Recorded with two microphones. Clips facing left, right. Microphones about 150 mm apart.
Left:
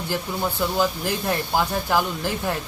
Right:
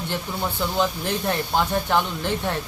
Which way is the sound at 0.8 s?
5° left (ahead or behind).